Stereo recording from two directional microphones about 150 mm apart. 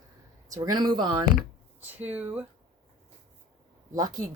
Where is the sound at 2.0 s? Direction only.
10° right (ahead or behind).